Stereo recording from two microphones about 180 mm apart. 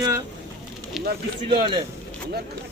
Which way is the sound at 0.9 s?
Centre (ahead or behind).